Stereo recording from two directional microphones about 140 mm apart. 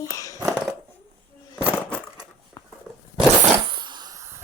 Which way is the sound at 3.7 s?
35° right (ahead or behind).